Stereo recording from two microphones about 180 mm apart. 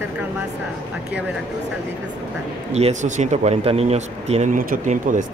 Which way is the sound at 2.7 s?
40° right (ahead or behind).